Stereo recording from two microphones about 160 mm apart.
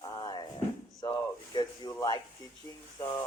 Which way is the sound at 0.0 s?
30° left (ahead or behind).